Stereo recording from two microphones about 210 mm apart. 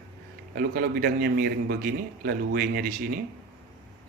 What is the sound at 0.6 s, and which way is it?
A man's voice, 45° right (ahead or behind).